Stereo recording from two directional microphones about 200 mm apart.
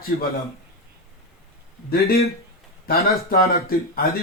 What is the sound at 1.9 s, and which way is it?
A man's voice, 50° left (ahead or behind).